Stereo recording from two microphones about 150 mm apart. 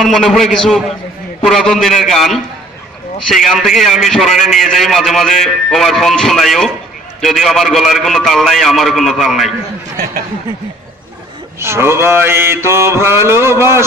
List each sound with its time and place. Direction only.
0.0 s a man's voice: centre (ahead or behind)
11.6 s mantra: 15° right (ahead or behind)